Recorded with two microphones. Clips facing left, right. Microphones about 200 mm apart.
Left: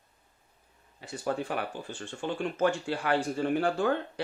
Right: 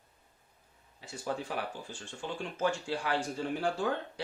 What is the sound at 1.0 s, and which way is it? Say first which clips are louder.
Speech: left 5 dB; 60° left (ahead or behind).